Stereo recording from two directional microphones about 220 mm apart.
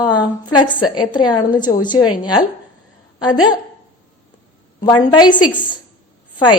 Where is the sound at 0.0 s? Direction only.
20° left (ahead or behind).